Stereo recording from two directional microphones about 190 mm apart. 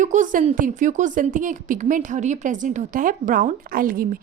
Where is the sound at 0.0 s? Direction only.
40° right (ahead or behind).